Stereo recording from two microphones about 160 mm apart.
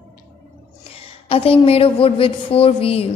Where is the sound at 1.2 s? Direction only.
35° left (ahead or behind).